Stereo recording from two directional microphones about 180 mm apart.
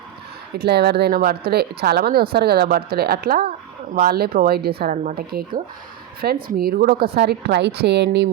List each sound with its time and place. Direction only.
0.6 s speech: 60° right (ahead or behind)